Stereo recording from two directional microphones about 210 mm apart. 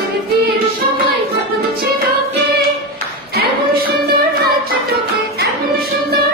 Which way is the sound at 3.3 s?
45° right (ahead or behind).